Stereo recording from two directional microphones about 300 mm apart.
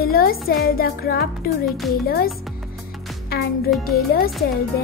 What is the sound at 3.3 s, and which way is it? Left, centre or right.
Music, left.